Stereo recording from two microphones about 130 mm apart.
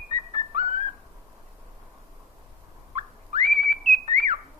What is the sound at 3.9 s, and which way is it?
Bird, 70° right (ahead or behind).